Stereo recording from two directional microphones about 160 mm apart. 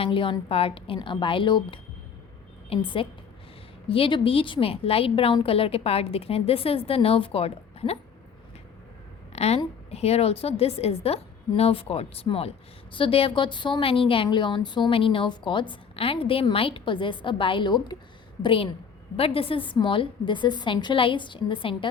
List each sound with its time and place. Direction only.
0.0 s a woman's voice: 35° left (ahead or behind)
9.3 s a sound: 40° left (ahead or behind)
9.9 s a woman's voice: 40° left (ahead or behind)